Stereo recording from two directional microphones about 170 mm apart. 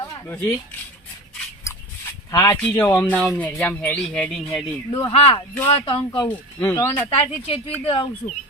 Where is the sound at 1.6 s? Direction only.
20° left (ahead or behind).